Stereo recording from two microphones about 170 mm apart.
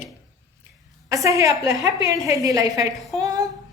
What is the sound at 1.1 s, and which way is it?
A woman's voice, 20° right (ahead or behind).